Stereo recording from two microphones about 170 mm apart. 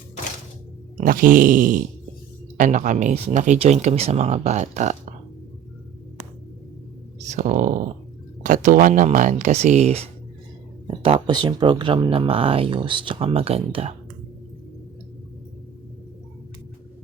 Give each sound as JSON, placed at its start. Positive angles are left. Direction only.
{"t": 0.9, "sound": "grunt", "side_deg": -55}
{"t": 2.6, "sound": "speech", "side_deg": -50}
{"t": 7.2, "sound": "speech", "side_deg": -45}